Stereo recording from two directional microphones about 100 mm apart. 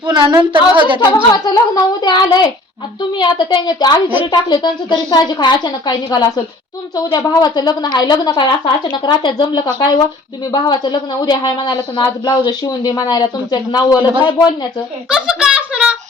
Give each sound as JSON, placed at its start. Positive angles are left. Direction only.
{"t": 0.0, "sound": "speech", "side_deg": -50}
{"t": 0.9, "sound": "speech", "side_deg": 45}
{"t": 15.1, "sound": "speech", "side_deg": -10}